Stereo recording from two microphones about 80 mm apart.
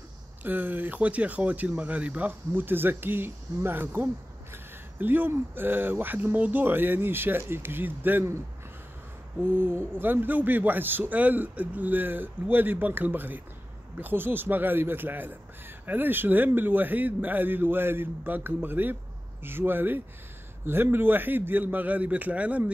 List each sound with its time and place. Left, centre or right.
0.4 s speech: right
9.4 s speech: right